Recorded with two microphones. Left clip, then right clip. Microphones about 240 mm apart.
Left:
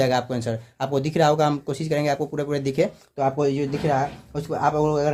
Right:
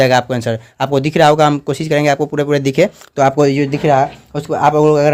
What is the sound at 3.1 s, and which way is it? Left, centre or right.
Speech, right.